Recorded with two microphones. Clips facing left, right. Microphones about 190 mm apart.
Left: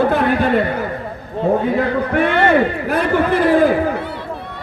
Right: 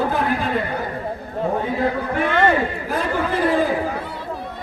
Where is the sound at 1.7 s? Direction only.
70° left (ahead or behind).